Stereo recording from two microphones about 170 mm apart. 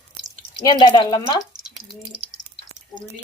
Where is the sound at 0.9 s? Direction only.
25° left (ahead or behind).